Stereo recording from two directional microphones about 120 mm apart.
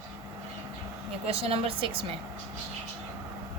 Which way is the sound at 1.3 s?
55° right (ahead or behind).